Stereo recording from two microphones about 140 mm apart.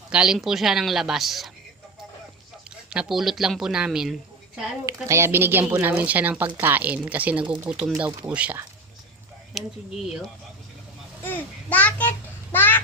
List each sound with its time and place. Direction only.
0.1 s speech: 5° right (ahead or behind)
2.6 s speech: 5° right (ahead or behind)
4.9 s speech: 20° right (ahead or behind); by 9.7 s centre (ahead or behind)
11.2 s a child's voice: 15° left (ahead or behind)